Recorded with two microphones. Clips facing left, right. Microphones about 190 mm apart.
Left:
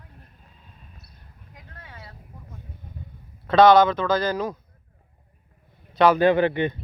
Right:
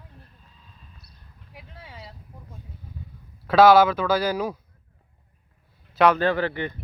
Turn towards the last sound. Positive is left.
turn(degrees=20)  # may be behind; listen again after turning